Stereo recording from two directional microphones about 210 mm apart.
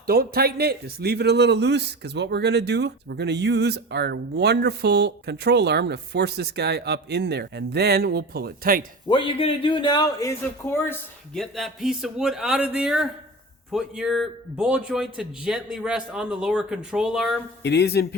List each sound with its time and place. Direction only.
0.1 s speech: 45° right (ahead or behind)
9.0 s speech: 25° left (ahead or behind)
11.3 s a man's voice: centre (ahead or behind)
17.6 s speech: 55° left (ahead or behind)